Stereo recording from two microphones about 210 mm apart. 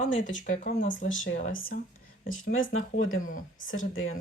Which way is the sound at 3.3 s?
40° left (ahead or behind).